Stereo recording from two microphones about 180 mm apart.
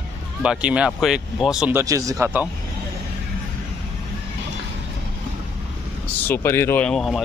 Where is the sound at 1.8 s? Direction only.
20° right (ahead or behind).